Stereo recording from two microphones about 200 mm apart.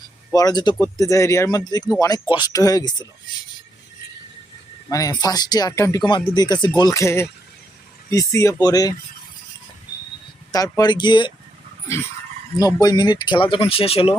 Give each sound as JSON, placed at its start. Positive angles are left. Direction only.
{"t": 0.3, "sound": "speech", "side_deg": 20}
{"t": 4.9, "sound": "speech", "side_deg": 15}
{"t": 10.5, "sound": "speech", "side_deg": 20}
{"t": 12.5, "sound": "speech", "side_deg": 20}